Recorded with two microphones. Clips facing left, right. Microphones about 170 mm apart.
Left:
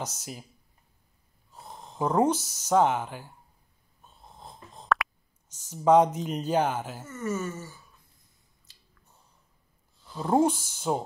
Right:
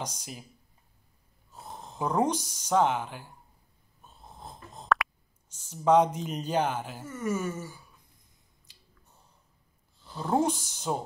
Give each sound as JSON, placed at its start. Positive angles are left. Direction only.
{"t": 0.0, "sound": "speech", "side_deg": 5}
{"t": 1.6, "sound": "speech", "side_deg": 5}
{"t": 4.4, "sound": "plop", "side_deg": 0}
{"t": 7.1, "sound": "speech", "side_deg": -10}
{"t": 8.7, "sound": "squish", "side_deg": -15}
{"t": 10.1, "sound": "speech", "side_deg": 10}